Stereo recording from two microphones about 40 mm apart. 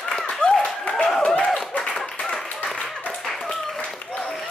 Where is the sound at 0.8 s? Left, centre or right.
Left.